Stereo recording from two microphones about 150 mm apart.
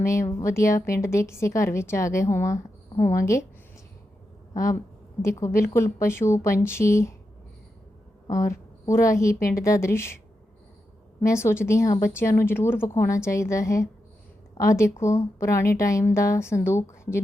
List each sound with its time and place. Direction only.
0.0 s speech: 20° left (ahead or behind)
4.5 s speech: 20° left (ahead or behind)
8.3 s a woman's voice: 20° left (ahead or behind)
11.2 s a woman's voice: 20° left (ahead or behind)